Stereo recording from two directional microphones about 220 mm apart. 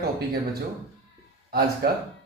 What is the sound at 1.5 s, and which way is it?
Speech, 45° right (ahead or behind).